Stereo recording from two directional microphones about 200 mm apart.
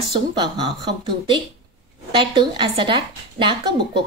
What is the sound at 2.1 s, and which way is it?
A woman's voice, 25° right (ahead or behind).